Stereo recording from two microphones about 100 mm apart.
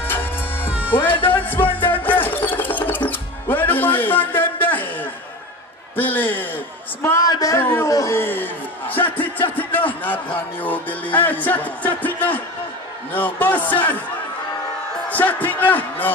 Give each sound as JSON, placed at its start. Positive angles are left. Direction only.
{"t": 0.0, "sound": "music", "side_deg": 20}
{"t": 5.9, "sound": "a man's voice", "side_deg": 20}
{"t": 7.2, "sound": "speech", "side_deg": 35}
{"t": 7.6, "sound": "speech", "side_deg": 20}
{"t": 7.9, "sound": "speech", "side_deg": 35}
{"t": 8.2, "sound": "speech", "side_deg": 20}
{"t": 9.6, "sound": "music", "side_deg": 20}
{"t": 15.0, "sound": "music", "side_deg": 15}